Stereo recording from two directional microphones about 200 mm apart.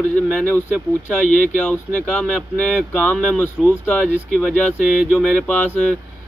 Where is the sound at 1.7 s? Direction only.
5° left (ahead or behind).